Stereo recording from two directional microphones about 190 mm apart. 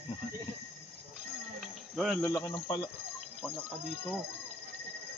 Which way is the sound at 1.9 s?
Centre (ahead or behind).